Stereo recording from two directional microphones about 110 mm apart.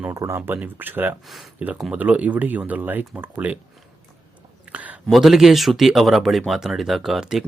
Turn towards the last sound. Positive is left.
turn(degrees=-5)  # may be behind; listen again after turning